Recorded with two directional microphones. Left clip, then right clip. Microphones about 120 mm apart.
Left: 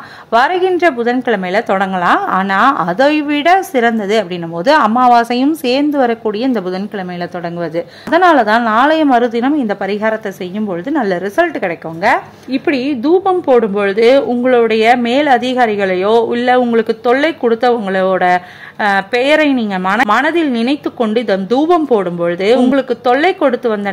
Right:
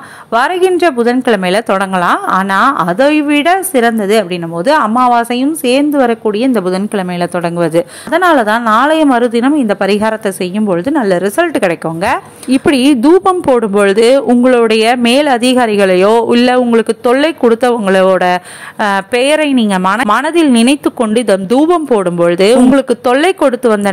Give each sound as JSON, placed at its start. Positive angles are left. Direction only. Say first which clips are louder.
{"t": 0.3, "sound": "a woman's voice", "louder": "right 1 dB", "side_deg": -20}
{"t": 8.1, "sound": "a woman's voice", "louder": "left 1 dB", "side_deg": -20}
{"t": 11.6, "sound": "speech", "louder": "right 2 dB", "side_deg": -35}
{"t": 12.4, "sound": "speech", "louder": "right 8 dB", "side_deg": -60}